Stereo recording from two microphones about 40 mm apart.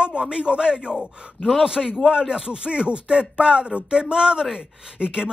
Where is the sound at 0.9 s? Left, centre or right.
Centre.